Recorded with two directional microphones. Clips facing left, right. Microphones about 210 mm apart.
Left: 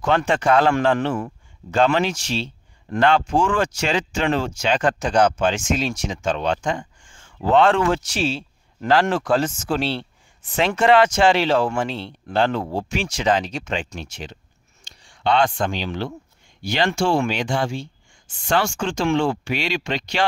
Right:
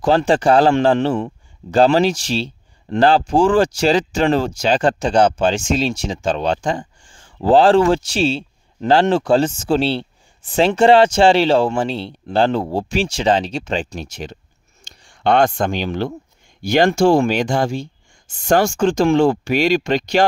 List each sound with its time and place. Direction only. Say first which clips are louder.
0.0 s a man's voice: right 5 dB; 30° right (ahead or behind)